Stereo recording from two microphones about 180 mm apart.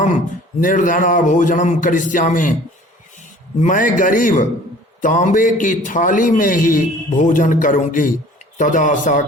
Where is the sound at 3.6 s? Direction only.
50° left (ahead or behind).